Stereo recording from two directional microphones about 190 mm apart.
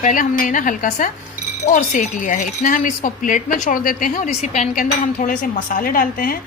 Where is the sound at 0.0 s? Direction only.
45° left (ahead or behind).